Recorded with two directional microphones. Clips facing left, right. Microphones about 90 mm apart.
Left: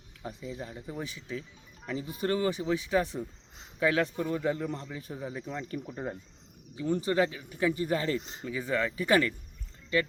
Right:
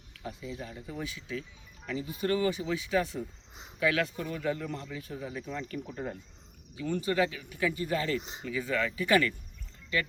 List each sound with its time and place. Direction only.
0.3 s speech: 35° left (ahead or behind)